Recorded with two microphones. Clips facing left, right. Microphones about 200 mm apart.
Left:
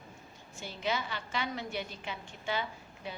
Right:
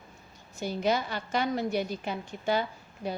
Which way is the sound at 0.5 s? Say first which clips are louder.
Right 7 dB; 40° right (ahead or behind).